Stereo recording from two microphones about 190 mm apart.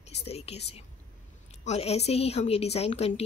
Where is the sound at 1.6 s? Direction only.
35° left (ahead or behind).